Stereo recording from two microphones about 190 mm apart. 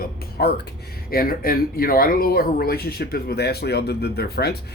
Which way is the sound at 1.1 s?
50° left (ahead or behind).